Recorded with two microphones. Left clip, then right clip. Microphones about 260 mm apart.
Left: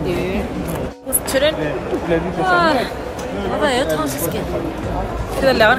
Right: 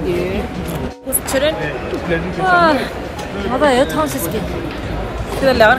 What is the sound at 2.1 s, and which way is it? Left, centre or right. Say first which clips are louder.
Speech: left 1 dB; left.